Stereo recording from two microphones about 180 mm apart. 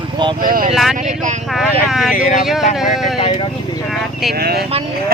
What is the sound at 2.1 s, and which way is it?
Speech, 45° left (ahead or behind).